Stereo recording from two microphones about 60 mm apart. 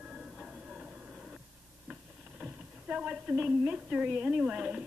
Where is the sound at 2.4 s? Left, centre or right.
Right.